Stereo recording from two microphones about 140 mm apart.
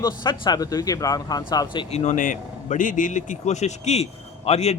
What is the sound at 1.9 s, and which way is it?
A man's voice, 55° left (ahead or behind).